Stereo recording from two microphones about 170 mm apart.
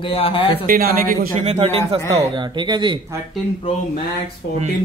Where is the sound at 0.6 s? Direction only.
60° right (ahead or behind).